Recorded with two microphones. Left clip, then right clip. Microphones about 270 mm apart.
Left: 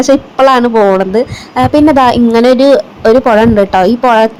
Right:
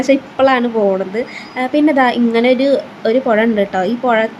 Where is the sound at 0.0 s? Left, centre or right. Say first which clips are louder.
Left 5 dB; centre.